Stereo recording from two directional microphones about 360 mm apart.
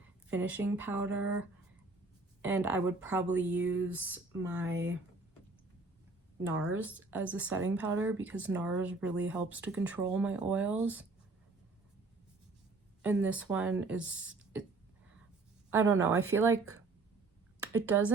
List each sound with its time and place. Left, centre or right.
0.3 s speech: centre
3.6 s speech: right
3.8 s speech: centre
6.7 s speech: centre
13.0 s speech: centre
15.7 s speech: centre
17.7 s speech: centre